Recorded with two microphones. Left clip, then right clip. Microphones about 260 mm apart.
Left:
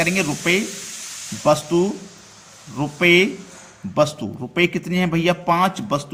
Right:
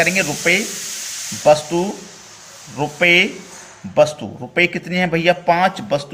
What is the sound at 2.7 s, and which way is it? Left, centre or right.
A man's voice, centre.